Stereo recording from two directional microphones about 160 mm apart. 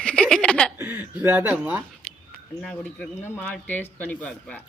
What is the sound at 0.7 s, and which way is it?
Speech, 10° right (ahead or behind).